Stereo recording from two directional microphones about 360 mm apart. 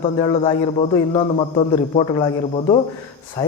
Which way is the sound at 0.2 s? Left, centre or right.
Centre.